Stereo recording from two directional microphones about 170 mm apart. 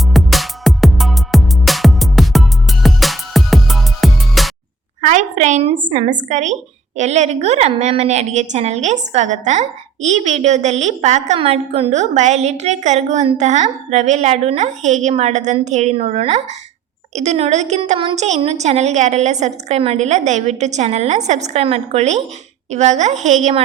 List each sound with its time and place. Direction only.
0.1 s music: centre (ahead or behind)
5.0 s a sound: 45° right (ahead or behind)
5.9 s a woman's voice: 45° right (ahead or behind)